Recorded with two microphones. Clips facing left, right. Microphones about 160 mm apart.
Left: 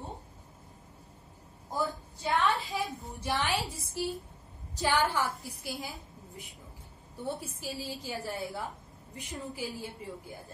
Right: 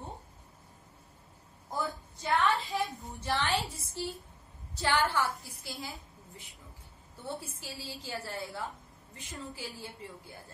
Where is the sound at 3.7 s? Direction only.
15° left (ahead or behind).